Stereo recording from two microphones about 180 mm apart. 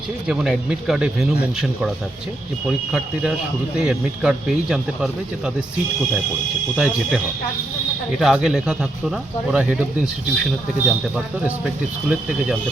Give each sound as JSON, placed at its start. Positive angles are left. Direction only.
{"t": 0.3, "sound": "speech", "side_deg": 0}
{"t": 3.8, "sound": "speech", "side_deg": -5}
{"t": 6.7, "sound": "speech", "side_deg": -5}
{"t": 8.2, "sound": "speech", "side_deg": -5}